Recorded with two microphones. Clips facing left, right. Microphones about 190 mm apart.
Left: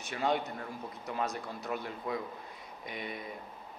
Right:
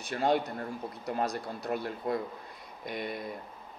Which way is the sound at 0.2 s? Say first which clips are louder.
Right 4 dB; 35° right (ahead or behind).